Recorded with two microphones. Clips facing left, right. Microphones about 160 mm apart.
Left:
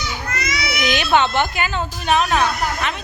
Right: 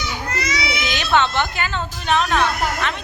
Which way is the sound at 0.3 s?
25° right (ahead or behind).